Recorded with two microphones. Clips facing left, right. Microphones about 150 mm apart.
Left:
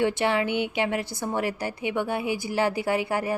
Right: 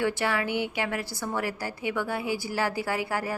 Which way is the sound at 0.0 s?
20° left (ahead or behind).